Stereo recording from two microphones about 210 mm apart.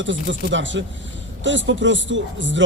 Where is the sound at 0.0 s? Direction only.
60° right (ahead or behind).